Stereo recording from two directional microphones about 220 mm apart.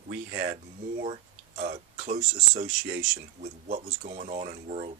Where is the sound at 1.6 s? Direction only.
35° right (ahead or behind).